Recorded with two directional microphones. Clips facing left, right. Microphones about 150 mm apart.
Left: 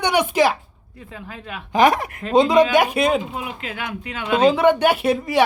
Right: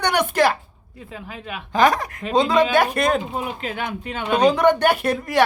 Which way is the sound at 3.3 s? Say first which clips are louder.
Right 3 dB; 35° right (ahead or behind).